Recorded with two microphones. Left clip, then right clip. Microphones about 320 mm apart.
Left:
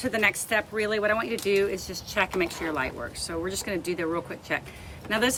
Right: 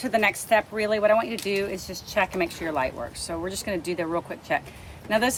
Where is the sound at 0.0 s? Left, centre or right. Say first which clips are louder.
Right 2 dB; centre.